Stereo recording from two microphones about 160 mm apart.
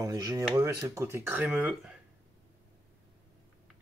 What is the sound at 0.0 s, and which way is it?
Speech, 20° right (ahead or behind).